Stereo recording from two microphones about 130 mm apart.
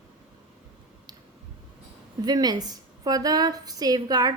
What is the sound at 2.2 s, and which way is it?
A woman's voice, 30° right (ahead or behind).